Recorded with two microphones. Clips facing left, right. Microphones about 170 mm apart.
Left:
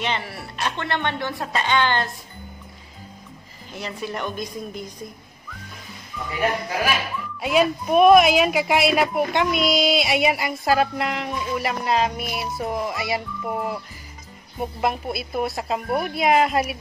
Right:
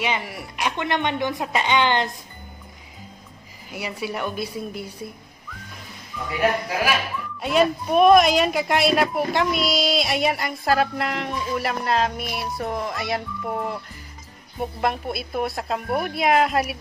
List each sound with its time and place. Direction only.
0.0 s speech: 10° right (ahead or behind)
3.7 s speech: 10° right (ahead or behind)
6.1 s music: centre (ahead or behind)
7.3 s speech: 5° left (ahead or behind)